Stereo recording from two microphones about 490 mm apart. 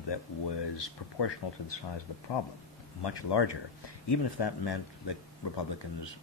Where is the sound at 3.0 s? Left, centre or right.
Left.